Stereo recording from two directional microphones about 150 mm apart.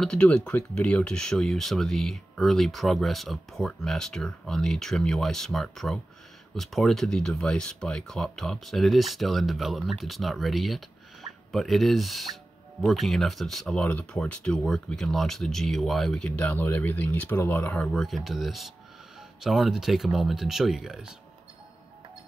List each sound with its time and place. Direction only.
0.0 s speech: 5° left (ahead or behind)